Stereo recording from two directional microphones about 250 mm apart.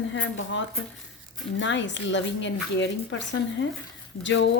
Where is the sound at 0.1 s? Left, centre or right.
Left.